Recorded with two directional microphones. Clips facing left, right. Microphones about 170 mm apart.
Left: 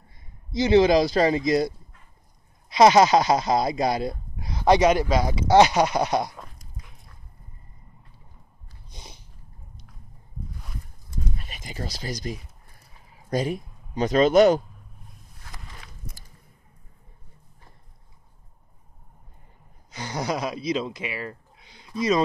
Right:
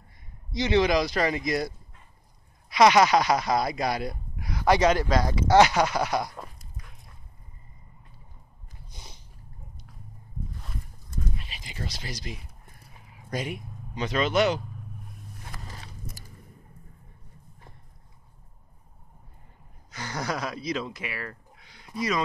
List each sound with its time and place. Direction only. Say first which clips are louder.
0.5 s speech: left 5 dB; 30° left (ahead or behind)
2.7 s speech: left 3 dB; 30° left (ahead or behind)
8.9 s a sound: left 3 dB; 20° left (ahead or behind)
11.3 s speech: left 3 dB; 45° left (ahead or behind)
15.6 s a sound: right 3 dB; 40° right (ahead or behind)
19.9 s speech: left 4 dB; 20° left (ahead or behind)